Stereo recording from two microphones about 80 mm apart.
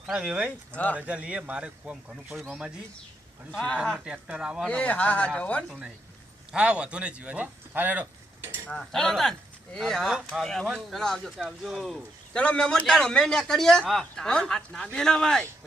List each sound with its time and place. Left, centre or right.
0.1 s speech: centre
4.0 s speech: centre
4.6 s a man's voice: centre
6.5 s speech: centre
8.6 s a man's voice: centre
12.3 s a man's voice: centre